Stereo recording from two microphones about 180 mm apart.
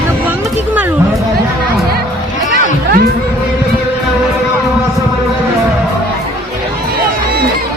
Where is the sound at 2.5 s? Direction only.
60° right (ahead or behind).